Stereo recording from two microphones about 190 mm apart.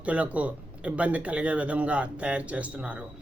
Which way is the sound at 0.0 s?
5° right (ahead or behind).